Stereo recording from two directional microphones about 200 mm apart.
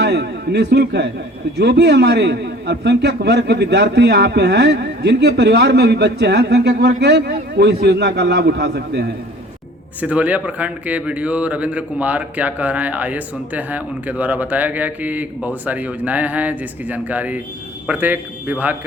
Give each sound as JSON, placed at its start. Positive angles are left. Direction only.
{"t": 0.0, "sound": "a sound", "side_deg": -55}
{"t": 1.5, "sound": "a man's voice", "side_deg": -55}
{"t": 10.0, "sound": "a man's voice", "side_deg": -5}